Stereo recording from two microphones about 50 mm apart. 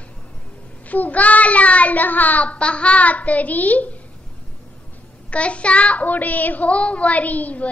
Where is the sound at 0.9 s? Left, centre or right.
Left.